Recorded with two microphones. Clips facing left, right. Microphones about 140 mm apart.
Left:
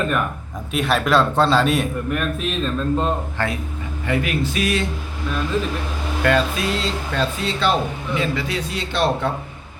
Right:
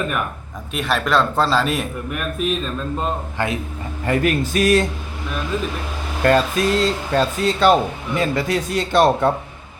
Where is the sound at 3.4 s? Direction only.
15° right (ahead or behind).